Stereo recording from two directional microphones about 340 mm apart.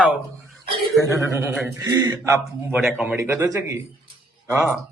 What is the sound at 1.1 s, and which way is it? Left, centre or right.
Speech, centre.